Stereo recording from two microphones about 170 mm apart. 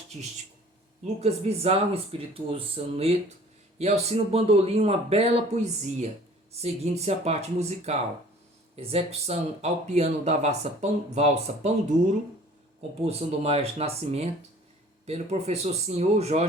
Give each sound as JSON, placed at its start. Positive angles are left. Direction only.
{"t": 1.0, "sound": "speech", "side_deg": -40}
{"t": 13.1, "sound": "speech", "side_deg": -35}